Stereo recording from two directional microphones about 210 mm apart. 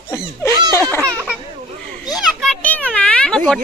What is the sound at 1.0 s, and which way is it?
Baby laughter, 5° right (ahead or behind).